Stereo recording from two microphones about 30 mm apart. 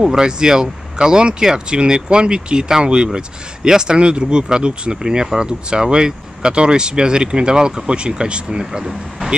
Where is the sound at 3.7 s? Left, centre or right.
Right.